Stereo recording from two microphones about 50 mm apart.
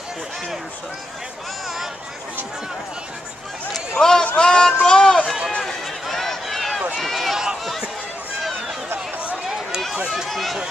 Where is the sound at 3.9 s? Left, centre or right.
Centre.